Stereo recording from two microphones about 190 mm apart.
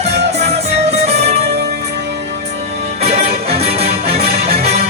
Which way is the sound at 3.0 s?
35° right (ahead or behind).